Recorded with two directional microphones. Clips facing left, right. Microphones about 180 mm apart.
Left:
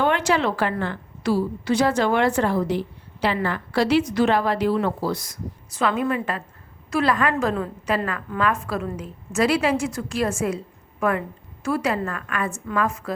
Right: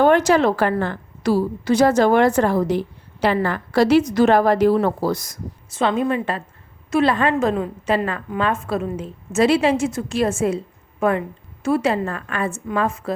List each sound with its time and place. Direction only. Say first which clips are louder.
0.0 s a woman's voice: right 6 dB; 40° right (ahead or behind)
5.7 s a woman's voice: right 3 dB; 25° right (ahead or behind)